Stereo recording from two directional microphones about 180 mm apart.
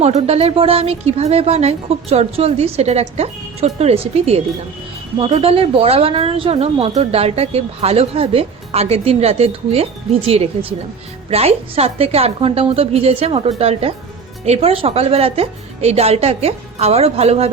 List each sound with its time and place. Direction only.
0.0 s a woman's voice: 35° right (ahead or behind)